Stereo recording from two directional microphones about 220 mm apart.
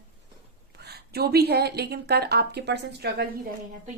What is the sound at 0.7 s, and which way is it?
Speech, 45° right (ahead or behind).